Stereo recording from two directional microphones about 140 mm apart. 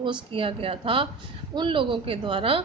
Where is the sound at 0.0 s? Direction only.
35° right (ahead or behind).